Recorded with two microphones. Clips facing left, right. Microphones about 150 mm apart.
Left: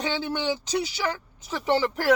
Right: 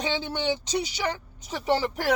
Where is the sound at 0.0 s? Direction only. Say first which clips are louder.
Left 1 dB; 20° right (ahead or behind).